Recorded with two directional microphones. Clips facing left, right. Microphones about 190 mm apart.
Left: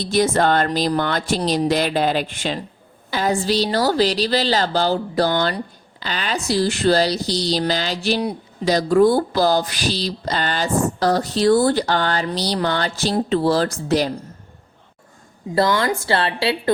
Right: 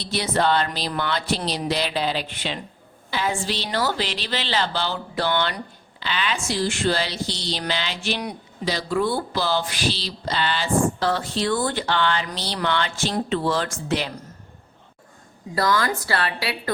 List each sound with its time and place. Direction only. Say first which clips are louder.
0.0 s speech: left 5 dB; 45° left (ahead or behind)
8.6 s speech: left 9 dB; 45° left (ahead or behind)
15.5 s a woman's voice: left 4 dB; 25° left (ahead or behind)